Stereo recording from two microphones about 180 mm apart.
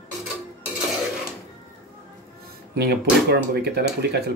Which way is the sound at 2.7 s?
60° right (ahead or behind).